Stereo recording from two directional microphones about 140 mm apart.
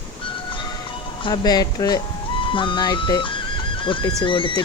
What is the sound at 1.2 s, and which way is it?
Speech, 30° left (ahead or behind).